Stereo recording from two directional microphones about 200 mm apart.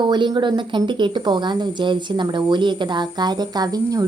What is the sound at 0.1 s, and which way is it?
Speech, 20° right (ahead or behind).